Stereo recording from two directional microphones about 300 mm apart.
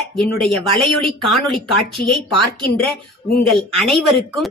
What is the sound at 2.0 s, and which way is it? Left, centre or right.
Speech, left.